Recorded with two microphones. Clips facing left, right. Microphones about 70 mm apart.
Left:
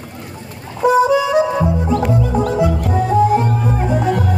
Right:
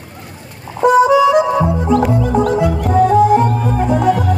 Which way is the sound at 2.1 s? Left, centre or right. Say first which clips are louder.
Right 2 dB; right.